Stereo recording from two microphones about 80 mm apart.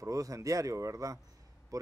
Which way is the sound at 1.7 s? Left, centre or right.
Right.